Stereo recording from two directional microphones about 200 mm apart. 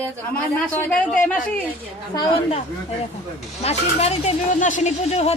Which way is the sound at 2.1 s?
20° left (ahead or behind).